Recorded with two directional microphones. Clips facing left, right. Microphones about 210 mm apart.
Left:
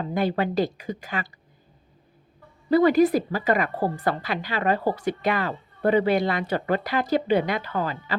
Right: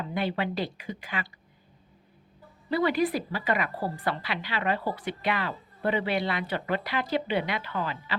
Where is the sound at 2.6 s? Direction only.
45° left (ahead or behind).